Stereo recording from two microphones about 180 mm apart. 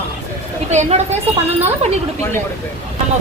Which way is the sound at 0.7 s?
40° right (ahead or behind).